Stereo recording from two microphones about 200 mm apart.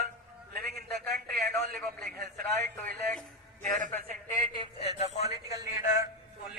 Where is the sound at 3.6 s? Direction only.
40° right (ahead or behind).